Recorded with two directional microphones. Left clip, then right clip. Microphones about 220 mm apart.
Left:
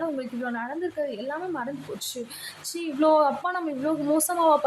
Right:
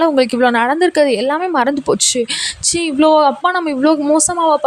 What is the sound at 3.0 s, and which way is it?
A woman's voice, 30° right (ahead or behind).